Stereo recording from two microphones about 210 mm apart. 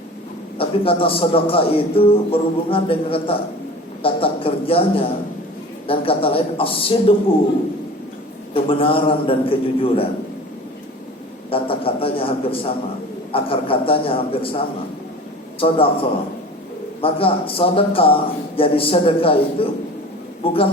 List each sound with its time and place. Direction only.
0.6 s a man's voice: 25° left (ahead or behind)
8.5 s a man's voice: 25° left (ahead or behind)
11.5 s a sound: 25° left (ahead or behind)
13.3 s a man's voice: 25° left (ahead or behind)
15.6 s a man's voice: 25° left (ahead or behind)